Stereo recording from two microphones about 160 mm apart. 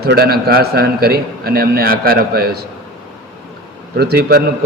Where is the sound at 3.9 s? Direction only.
80° right.